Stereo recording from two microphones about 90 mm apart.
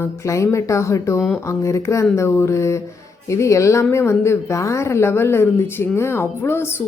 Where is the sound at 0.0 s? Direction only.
30° left (ahead or behind).